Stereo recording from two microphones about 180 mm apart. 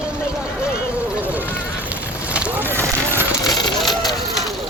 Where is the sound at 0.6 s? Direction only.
5° right (ahead or behind).